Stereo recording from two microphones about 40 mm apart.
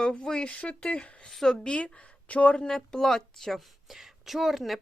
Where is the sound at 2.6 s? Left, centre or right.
Centre.